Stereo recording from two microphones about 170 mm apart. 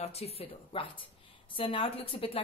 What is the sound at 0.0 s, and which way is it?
A woman's voice, 35° left (ahead or behind).